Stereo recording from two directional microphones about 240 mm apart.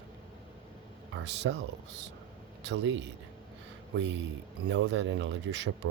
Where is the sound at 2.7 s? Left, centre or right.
Right.